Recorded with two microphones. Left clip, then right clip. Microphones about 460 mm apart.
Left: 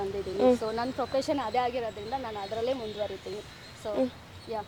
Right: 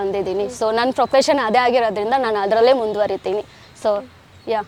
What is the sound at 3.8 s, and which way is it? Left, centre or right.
Speech, right.